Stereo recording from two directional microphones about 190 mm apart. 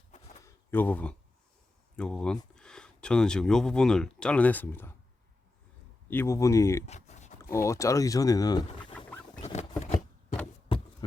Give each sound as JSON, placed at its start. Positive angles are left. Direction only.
{"t": 0.4, "sound": "a sound", "side_deg": 10}
{"t": 2.0, "sound": "speech", "side_deg": 5}
{"t": 6.1, "sound": "speech", "side_deg": 15}
{"t": 6.8, "sound": "a sound", "side_deg": 35}
{"t": 7.5, "sound": "speech", "side_deg": 15}
{"t": 8.8, "sound": "pig", "side_deg": 5}
{"t": 9.4, "sound": "rodents", "side_deg": 35}